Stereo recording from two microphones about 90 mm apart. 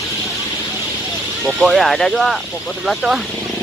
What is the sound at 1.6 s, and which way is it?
Speech, centre (ahead or behind).